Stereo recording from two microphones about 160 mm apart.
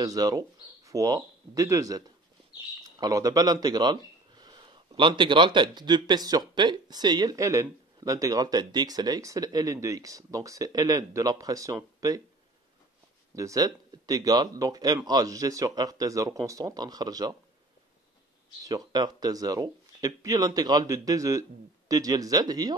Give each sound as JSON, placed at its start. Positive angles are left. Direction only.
{"t": 0.0, "sound": "speech", "side_deg": -25}
{"t": 13.3, "sound": "speech", "side_deg": -20}
{"t": 18.7, "sound": "speech", "side_deg": -25}